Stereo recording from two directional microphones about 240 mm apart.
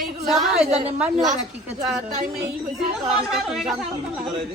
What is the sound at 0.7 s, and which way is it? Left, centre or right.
Speech, right.